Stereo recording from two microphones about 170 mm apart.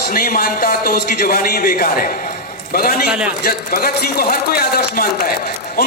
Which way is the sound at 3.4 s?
65° left (ahead or behind).